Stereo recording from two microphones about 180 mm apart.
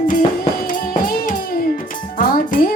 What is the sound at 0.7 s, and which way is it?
Music, 50° left (ahead or behind).